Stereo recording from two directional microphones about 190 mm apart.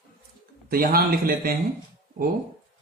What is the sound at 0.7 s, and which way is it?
Speech, 50° right (ahead or behind).